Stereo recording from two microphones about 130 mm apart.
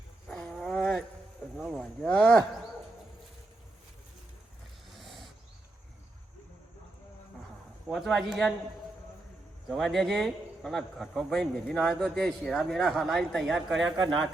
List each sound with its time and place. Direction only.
0.3 s wild animals: centre (ahead or behind)
1.5 s a sound: 5° right (ahead or behind)
2.0 s a sound: 10° left (ahead or behind)
4.9 s wild animals: centre (ahead or behind)
7.9 s speech: centre (ahead or behind)
9.6 s speech: centre (ahead or behind)
13.9 s speech: 35° right (ahead or behind)